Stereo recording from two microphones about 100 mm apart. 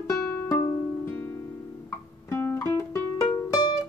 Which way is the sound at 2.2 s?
20° left (ahead or behind).